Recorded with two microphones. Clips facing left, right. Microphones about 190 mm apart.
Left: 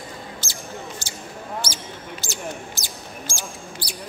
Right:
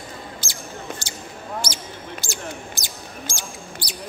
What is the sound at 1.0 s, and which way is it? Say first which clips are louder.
Basketball bounce: right 1 dB; 15° right (ahead or behind).